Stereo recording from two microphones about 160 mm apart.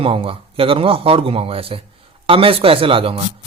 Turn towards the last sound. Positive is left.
turn(degrees=-35)  # may be behind; listen again after turning